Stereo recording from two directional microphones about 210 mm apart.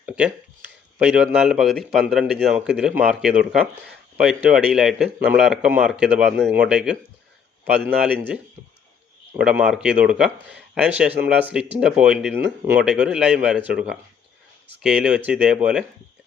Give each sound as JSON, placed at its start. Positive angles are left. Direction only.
{"t": 0.0, "sound": "speech", "side_deg": -5}
{"t": 9.4, "sound": "speech", "side_deg": -5}